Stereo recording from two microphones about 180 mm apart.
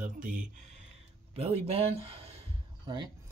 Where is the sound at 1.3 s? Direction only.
35° right (ahead or behind).